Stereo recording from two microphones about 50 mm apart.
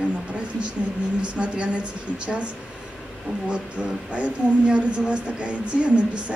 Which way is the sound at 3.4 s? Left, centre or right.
Right.